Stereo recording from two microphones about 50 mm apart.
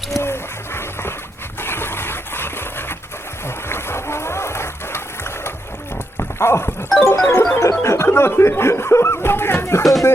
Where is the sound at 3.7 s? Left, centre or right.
Left.